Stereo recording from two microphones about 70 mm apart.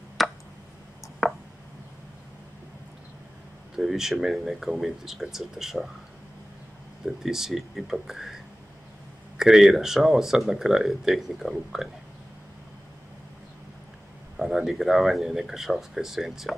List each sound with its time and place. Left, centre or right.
0.2 s tick: centre
1.2 s a sound: centre
3.7 s speech: centre
7.2 s speech: centre
9.4 s speech: centre
14.3 s speech: centre